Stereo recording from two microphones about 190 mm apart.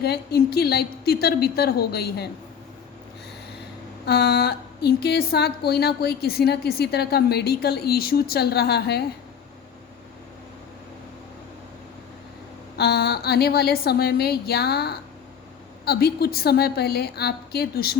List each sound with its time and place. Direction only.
0.0 s a woman's voice: 55° left (ahead or behind)
4.0 s a woman's voice: 55° left (ahead or behind)
12.7 s a woman's voice: 55° left (ahead or behind)